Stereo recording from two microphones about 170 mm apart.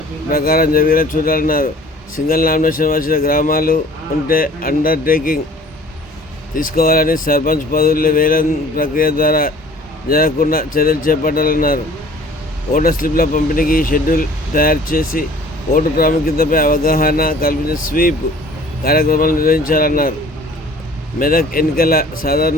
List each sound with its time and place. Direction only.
0.3 s speech: 60° left (ahead or behind)
6.5 s speech: 55° left (ahead or behind)
21.2 s speech: 60° left (ahead or behind)